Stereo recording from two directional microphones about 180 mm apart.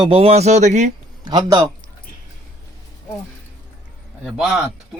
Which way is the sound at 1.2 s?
20° right (ahead or behind).